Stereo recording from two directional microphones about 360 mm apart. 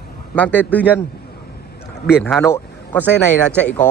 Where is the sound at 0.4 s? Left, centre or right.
Centre.